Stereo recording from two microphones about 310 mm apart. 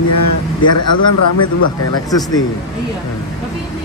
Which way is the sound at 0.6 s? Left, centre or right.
Left.